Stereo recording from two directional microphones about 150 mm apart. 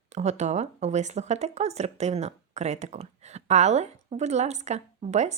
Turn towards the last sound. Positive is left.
turn(degrees=-50)  # may be behind; listen again after turning